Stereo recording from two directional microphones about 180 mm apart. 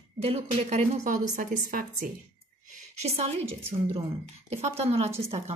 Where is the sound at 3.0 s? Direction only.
35° right (ahead or behind).